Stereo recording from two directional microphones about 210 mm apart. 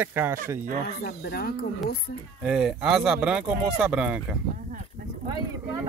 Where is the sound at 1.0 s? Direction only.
50° left (ahead or behind).